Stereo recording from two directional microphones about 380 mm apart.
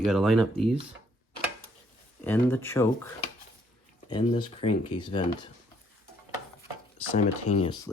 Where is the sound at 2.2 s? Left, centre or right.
Centre.